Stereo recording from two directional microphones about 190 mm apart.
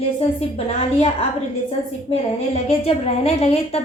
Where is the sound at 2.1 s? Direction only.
30° left (ahead or behind).